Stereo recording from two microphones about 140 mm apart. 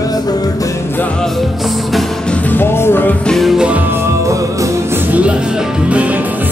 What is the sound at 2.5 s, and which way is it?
Music, 15° left (ahead or behind).